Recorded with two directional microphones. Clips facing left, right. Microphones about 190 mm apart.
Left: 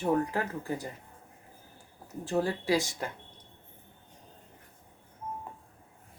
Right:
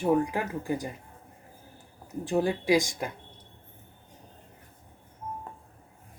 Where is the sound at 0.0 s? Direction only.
10° right (ahead or behind).